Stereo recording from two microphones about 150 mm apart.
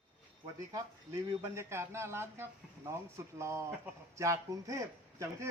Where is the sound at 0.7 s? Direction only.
20° right (ahead or behind).